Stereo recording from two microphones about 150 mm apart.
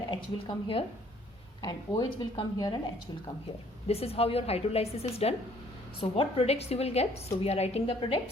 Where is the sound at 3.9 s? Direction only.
40° left (ahead or behind).